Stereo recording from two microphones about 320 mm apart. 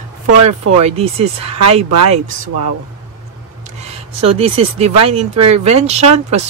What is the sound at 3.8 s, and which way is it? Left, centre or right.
Speech, centre.